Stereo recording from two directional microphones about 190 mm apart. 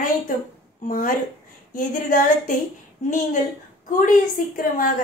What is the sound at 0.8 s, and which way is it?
Speech, 45° left (ahead or behind).